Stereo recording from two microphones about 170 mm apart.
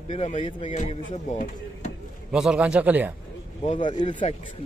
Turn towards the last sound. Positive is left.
turn(degrees=30)  # may be behind; listen again after turning